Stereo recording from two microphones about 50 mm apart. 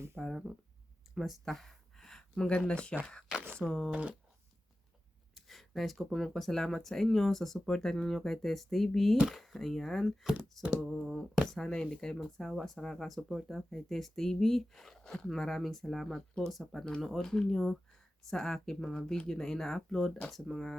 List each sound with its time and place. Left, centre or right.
0.2 s speech: centre
1.1 s a sound: centre
2.6 s speech: centre
3.7 s speech: centre
5.3 s speech: centre
12.4 s speech: centre